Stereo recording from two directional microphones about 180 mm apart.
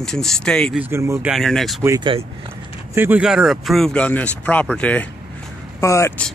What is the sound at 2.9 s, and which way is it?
Speech, 10° right (ahead or behind).